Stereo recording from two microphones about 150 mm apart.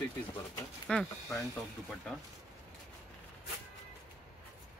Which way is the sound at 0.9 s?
5° left (ahead or behind).